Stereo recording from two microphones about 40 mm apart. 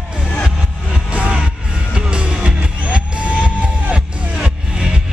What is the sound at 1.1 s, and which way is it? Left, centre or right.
Music, right.